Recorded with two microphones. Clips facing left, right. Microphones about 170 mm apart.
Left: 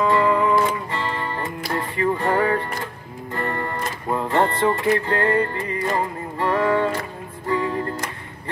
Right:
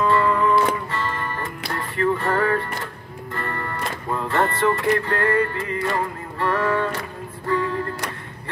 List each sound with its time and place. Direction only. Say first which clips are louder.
0.0 s music: left 1 dB; 15° left (ahead or behind)